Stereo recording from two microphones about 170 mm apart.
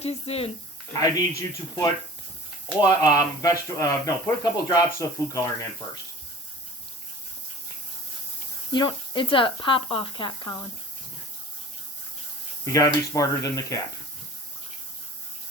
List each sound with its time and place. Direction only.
0.0 s speech: 35° left (ahead or behind)
0.9 s speech: 20° left (ahead or behind)
8.7 s speech: 25° left (ahead or behind)
12.6 s speech: 20° left (ahead or behind)